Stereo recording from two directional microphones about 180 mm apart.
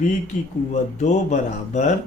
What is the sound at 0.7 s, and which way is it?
Speech, 40° left (ahead or behind).